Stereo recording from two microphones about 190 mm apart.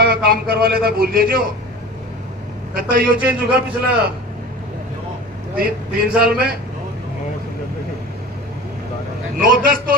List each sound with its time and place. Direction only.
0.0 s a man's voice: 55° right (ahead or behind)
2.7 s a man's voice: 50° right (ahead or behind)
3.2 s a man's voice: 5° right (ahead or behind)
5.5 s a man's voice: 50° right (ahead or behind)
9.4 s a man's voice: 45° right (ahead or behind)